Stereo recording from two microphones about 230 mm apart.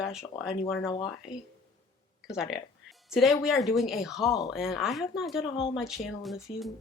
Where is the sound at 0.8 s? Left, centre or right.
Centre.